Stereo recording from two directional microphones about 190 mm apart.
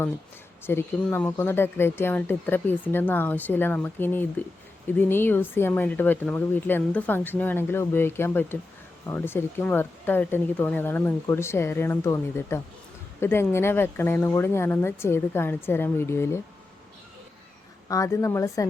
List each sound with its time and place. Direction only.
0.6 s speech: 10° left (ahead or behind)
17.8 s speech: 15° left (ahead or behind)